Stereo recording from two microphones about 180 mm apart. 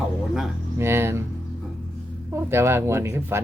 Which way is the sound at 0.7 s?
15° right (ahead or behind).